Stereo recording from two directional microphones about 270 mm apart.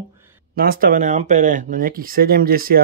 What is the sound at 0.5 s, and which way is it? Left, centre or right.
Speech, right.